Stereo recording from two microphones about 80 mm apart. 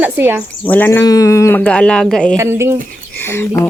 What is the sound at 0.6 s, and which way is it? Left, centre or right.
Speech, left.